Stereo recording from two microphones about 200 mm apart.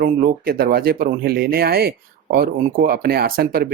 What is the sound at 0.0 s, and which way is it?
Speech, 45° right (ahead or behind).